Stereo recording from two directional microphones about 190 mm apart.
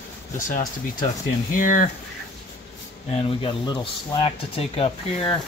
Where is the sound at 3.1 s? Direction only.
25° left (ahead or behind).